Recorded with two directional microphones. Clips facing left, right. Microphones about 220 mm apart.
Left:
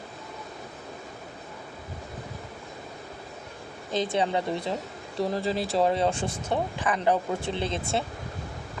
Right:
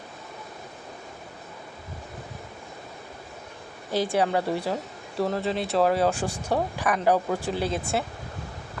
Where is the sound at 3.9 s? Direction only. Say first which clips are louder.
Right 2 dB; 10° right (ahead or behind).